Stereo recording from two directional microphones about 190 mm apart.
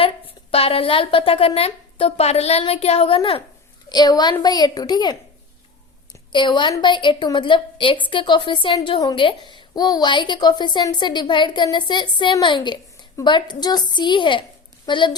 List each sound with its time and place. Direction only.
0.5 s a woman's voice: 30° left (ahead or behind)
6.3 s a woman's voice: 25° left (ahead or behind)